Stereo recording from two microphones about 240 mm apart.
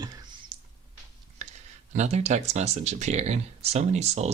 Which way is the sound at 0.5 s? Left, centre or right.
Centre.